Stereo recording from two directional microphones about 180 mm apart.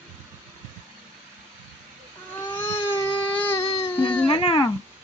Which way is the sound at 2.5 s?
15° left (ahead or behind).